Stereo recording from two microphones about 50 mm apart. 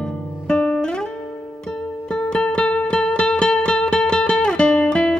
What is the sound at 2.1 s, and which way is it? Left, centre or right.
Music, centre.